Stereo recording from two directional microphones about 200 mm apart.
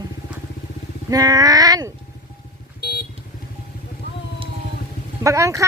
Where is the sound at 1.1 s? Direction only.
20° right (ahead or behind).